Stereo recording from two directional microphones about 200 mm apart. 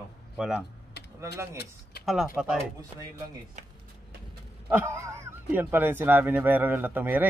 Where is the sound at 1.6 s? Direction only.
55° left (ahead or behind).